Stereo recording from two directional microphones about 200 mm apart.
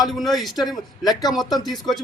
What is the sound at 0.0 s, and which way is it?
A man's voice, centre (ahead or behind).